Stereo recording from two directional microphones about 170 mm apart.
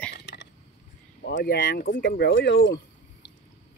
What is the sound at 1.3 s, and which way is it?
Speech, 70° left (ahead or behind).